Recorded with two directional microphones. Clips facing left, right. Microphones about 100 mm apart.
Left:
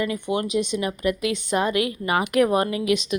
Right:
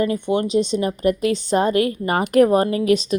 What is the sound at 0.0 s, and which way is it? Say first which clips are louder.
A woman's voice: right 5 dB; 35° right (ahead or behind).